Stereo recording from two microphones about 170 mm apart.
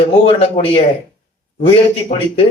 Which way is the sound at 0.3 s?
35° left (ahead or behind).